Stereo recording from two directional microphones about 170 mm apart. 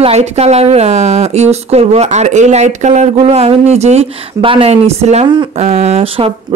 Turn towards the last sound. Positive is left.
turn(degrees=-35)  # may be behind; listen again after turning